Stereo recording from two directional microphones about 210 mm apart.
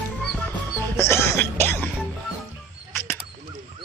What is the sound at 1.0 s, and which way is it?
Speech, 10° left (ahead or behind).